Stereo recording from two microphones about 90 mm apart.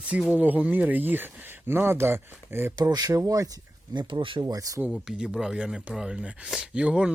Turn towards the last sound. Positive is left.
turn(degrees=-10)  # may be behind; listen again after turning